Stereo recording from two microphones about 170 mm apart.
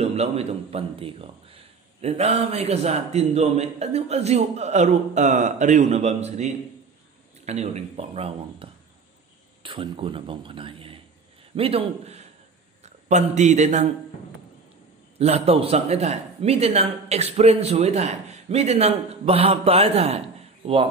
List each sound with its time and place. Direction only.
0.0 s a man's voice: 35° right (ahead or behind)
15.1 s a man's voice: 40° right (ahead or behind)